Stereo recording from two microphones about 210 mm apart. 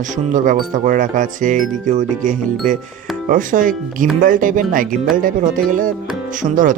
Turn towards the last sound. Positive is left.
turn(degrees=-40)  # may be behind; listen again after turning